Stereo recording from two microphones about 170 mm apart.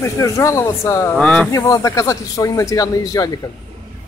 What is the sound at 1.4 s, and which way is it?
A man's voice, 20° left (ahead or behind).